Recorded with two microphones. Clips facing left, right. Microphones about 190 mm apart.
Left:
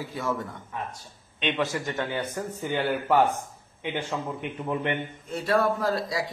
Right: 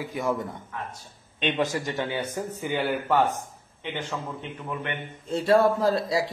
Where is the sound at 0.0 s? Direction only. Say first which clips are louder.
Right 2 dB; 15° right (ahead or behind).